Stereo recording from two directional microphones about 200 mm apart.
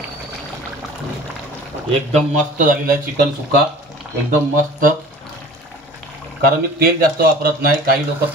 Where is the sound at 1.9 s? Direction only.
35° right (ahead or behind).